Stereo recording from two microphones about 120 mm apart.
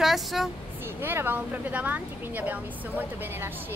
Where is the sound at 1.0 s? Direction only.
15° right (ahead or behind).